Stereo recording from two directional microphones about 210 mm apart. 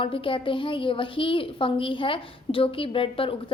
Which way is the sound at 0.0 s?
25° left (ahead or behind).